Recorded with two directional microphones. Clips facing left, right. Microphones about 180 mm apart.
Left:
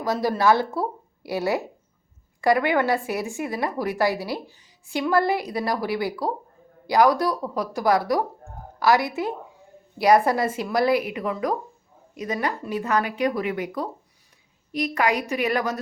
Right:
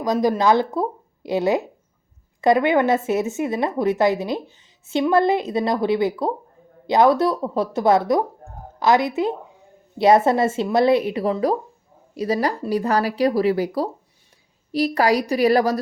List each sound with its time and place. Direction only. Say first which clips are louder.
0.0 s a woman's voice: right 3 dB; 20° right (ahead or behind); by 15.8 s 35° right (ahead or behind)